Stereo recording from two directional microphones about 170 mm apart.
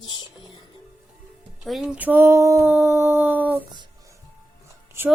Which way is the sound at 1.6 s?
5° right (ahead or behind).